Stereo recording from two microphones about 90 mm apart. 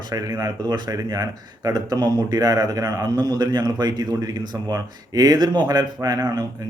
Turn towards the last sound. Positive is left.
turn(degrees=-45)  # may be behind; listen again after turning